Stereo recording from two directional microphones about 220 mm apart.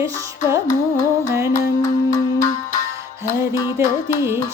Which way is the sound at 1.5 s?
15° left (ahead or behind).